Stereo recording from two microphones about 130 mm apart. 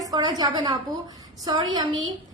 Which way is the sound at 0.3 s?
30° right (ahead or behind).